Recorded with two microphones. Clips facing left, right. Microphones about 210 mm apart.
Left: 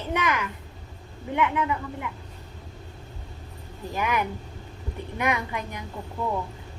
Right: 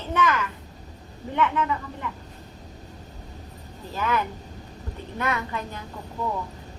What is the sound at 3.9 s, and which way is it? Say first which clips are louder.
A woman's voice: even; 15° left (ahead or behind).